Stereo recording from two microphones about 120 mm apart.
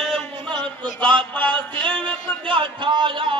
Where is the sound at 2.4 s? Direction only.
45° right (ahead or behind).